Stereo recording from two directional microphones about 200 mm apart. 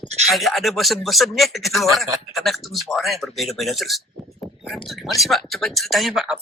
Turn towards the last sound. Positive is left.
turn(degrees=0)  # may be behind; listen again after turning